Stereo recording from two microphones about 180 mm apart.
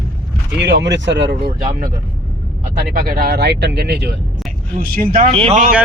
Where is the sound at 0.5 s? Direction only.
75° right (ahead or behind); by 1.9 s 55° right (ahead or behind).